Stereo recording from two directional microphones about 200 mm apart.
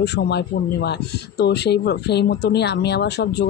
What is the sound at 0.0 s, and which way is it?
Speech, 55° left (ahead or behind).